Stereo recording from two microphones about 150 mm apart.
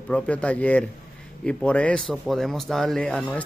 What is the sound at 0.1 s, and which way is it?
A man's voice, 10° left (ahead or behind).